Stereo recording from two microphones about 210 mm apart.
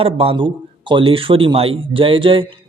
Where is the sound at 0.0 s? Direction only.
25° right (ahead or behind).